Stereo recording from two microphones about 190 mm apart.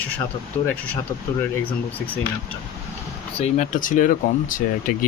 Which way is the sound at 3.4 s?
40° left (ahead or behind).